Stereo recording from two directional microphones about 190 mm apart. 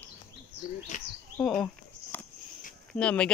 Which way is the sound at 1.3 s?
5° left (ahead or behind).